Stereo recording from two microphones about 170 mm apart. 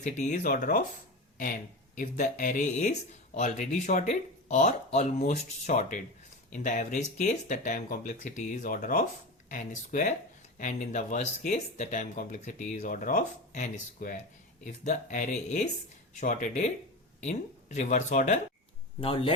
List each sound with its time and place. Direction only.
0.0 s speech: 45° left (ahead or behind)
2.0 s speech: 50° left (ahead or behind)
18.9 s speech: 35° left (ahead or behind)